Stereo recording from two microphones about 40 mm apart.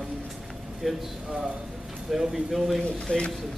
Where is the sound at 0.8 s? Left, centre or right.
Centre.